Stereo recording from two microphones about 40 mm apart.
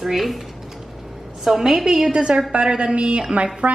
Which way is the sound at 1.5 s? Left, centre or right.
Centre.